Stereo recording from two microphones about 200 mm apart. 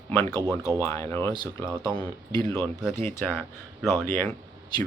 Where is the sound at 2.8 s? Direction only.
Centre (ahead or behind).